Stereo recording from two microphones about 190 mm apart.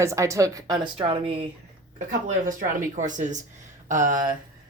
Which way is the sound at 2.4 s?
45° right (ahead or behind).